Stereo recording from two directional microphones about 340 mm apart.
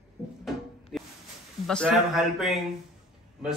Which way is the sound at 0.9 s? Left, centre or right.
Centre.